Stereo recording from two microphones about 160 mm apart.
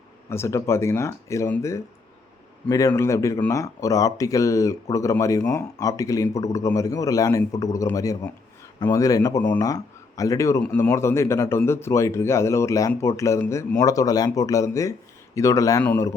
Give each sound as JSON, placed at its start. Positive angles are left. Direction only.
{"t": 0.3, "sound": "speech", "side_deg": 15}
{"t": 10.6, "sound": "speech", "side_deg": 10}